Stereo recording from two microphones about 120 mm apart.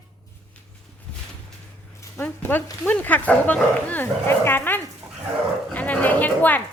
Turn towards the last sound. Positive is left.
turn(degrees=15)  # may be behind; listen again after turning